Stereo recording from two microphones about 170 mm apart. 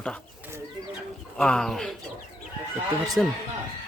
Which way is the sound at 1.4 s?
5° left (ahead or behind).